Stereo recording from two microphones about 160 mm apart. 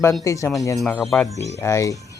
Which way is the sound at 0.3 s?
20° left (ahead or behind).